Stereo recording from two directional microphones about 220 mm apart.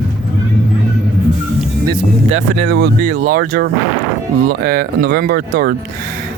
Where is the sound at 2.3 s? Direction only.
55° right (ahead or behind).